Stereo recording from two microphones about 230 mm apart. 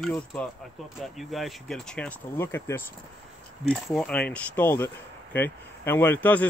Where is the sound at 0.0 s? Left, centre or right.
Centre.